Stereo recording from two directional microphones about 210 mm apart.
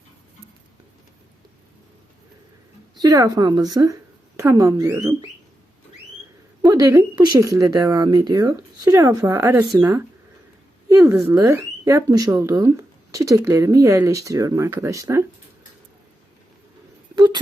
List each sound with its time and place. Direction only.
3.0 s speech: 15° right (ahead or behind)
6.6 s speech: 20° right (ahead or behind)
17.2 s a sound: 20° right (ahead or behind)